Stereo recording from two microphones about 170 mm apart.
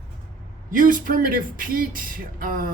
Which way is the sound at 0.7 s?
50° right (ahead or behind).